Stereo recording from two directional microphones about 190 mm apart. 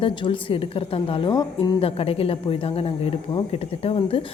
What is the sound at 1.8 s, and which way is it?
Speech, 30° left (ahead or behind).